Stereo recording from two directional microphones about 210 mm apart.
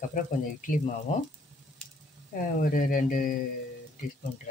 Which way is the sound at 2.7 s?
40° left (ahead or behind).